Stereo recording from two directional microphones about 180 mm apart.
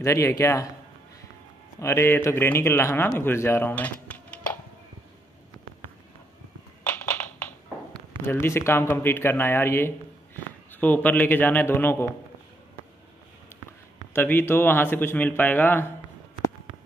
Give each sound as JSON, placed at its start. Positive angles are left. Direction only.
{"t": 0.0, "sound": "a man's voice", "side_deg": 15}
{"t": 1.8, "sound": "a man's voice", "side_deg": 15}
{"t": 6.9, "sound": "a sound", "side_deg": 10}
{"t": 8.3, "sound": "a man's voice", "side_deg": 15}
{"t": 14.1, "sound": "a man's voice", "side_deg": 10}